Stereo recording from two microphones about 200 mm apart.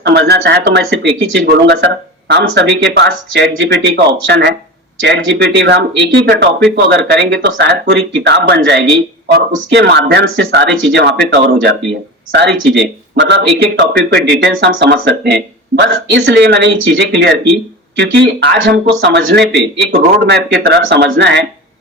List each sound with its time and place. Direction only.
0.0 s speech: 55° right (ahead or behind)